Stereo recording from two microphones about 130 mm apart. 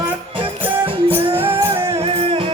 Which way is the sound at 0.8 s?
45° right (ahead or behind).